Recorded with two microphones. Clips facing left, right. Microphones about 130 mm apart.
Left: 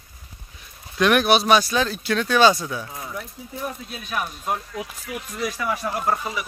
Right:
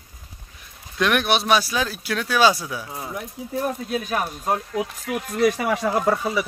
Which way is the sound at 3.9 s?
40° right (ahead or behind).